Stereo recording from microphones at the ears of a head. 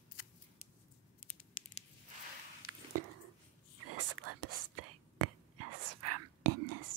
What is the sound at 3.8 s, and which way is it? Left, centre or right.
Whispering, right.